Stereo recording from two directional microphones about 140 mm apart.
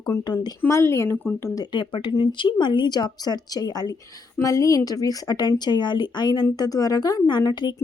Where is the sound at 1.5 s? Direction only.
30° left (ahead or behind).